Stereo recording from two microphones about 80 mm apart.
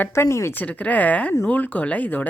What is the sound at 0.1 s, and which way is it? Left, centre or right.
Speech, left.